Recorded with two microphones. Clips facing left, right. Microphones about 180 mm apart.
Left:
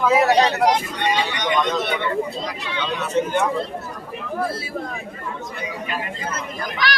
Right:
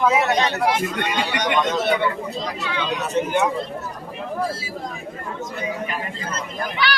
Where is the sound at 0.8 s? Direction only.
45° right (ahead or behind).